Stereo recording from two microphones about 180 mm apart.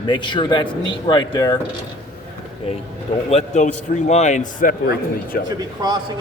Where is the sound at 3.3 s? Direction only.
40° left (ahead or behind).